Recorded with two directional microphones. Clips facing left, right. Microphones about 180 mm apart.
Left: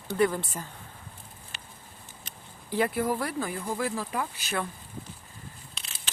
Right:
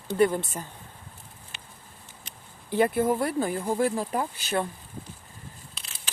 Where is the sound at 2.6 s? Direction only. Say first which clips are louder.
Right 4 dB; 25° right (ahead or behind).